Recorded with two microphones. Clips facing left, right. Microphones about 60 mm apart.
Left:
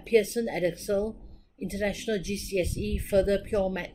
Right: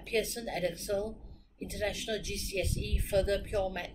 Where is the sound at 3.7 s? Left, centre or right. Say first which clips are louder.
Left 5 dB; left.